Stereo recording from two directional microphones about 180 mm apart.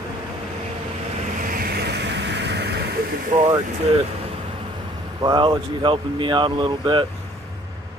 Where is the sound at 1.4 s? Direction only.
55° right (ahead or behind).